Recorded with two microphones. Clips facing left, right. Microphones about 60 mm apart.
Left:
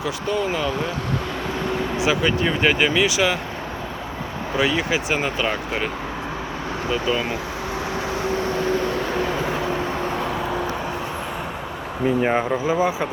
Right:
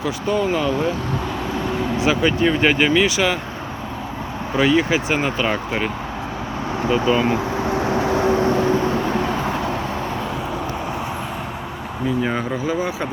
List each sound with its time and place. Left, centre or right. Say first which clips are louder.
0.3 s speech: right 4 dB; centre
2.0 s speech: right 3 dB; centre
4.5 s speech: right 4 dB; centre
6.9 s speech: right 5 dB; centre
7.8 s vehicle: right 6 dB; right
12.0 s speech: left 2 dB; left
12.4 s speech: left 2 dB; centre